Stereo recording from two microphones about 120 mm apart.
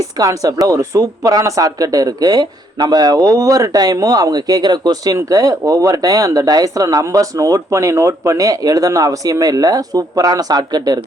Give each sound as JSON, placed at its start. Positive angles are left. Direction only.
{"t": 0.0, "sound": "speech", "side_deg": -30}